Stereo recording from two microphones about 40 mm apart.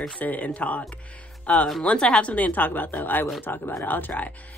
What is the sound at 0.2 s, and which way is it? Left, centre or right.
Speech, left.